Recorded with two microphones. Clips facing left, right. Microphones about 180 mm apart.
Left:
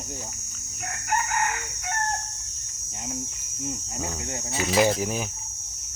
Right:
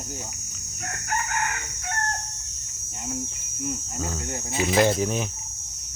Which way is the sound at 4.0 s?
15° left (ahead or behind).